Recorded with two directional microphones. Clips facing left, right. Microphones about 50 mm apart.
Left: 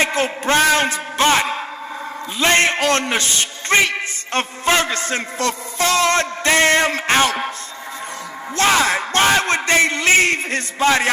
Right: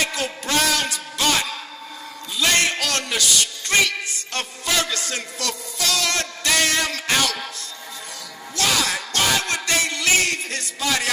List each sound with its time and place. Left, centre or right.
0.0 s a man's voice: left
8.5 s a man's voice: left